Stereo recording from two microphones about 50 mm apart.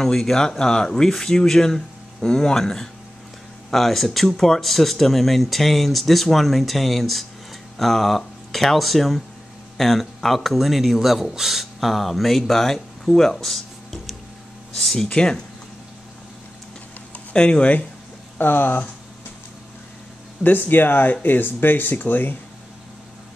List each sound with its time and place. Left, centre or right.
0.0 s speech: centre
17.3 s speech: left
18.4 s speech: left
20.4 s speech: left